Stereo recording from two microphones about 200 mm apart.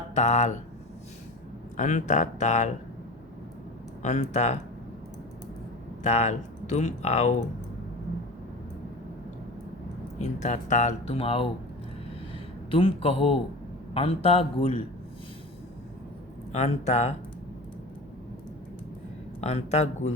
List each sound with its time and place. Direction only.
0.1 s speech: 35° left (ahead or behind)
1.7 s speech: 40° left (ahead or behind)
4.0 s speech: 35° left (ahead or behind)
6.0 s speech: 35° left (ahead or behind)
10.2 s speech: 35° left (ahead or behind)
12.7 s a man's voice: 30° left (ahead or behind)
16.5 s speech: 35° left (ahead or behind)
19.4 s speech: 30° left (ahead or behind)